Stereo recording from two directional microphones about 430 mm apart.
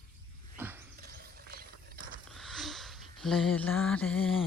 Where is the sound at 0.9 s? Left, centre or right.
Right.